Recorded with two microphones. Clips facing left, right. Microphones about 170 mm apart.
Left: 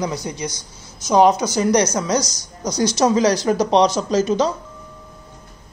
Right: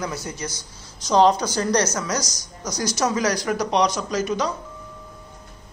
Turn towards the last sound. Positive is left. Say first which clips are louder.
# left 6 dB
turn(degrees=25)  # may be behind; listen again after turning